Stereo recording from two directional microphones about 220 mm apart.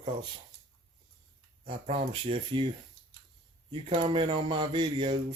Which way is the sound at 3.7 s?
25° right (ahead or behind).